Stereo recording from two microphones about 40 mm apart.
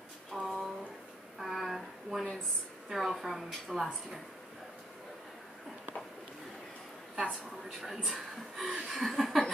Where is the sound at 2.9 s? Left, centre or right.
Centre.